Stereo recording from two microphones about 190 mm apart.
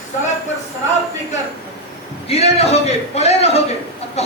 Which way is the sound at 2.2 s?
35° left (ahead or behind).